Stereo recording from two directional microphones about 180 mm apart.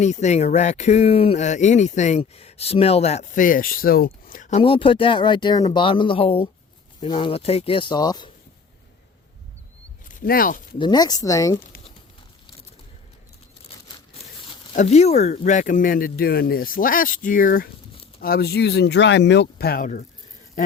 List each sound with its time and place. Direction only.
0.0 s speech: 40° left (ahead or behind); by 8.3 s 20° left (ahead or behind)
10.1 s speech: 50° left (ahead or behind)
10.8 s speech: 25° left (ahead or behind)
14.2 s speech: 30° left (ahead or behind)